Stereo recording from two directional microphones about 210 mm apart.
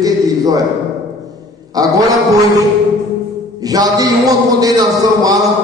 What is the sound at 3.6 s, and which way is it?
A man's voice, 15° right (ahead or behind).